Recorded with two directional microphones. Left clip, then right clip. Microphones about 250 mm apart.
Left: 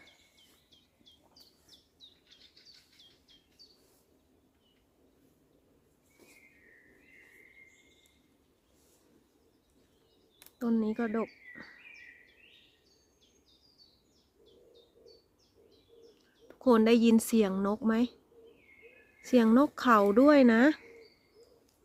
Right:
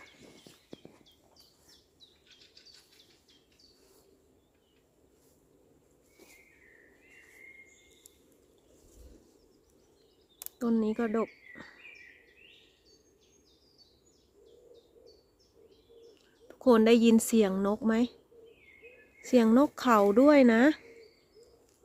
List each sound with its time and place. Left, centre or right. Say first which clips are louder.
10.6 s speech: right 2 dB; centre
16.5 s speech: right 2 dB; centre
19.2 s speech: right 1 dB; centre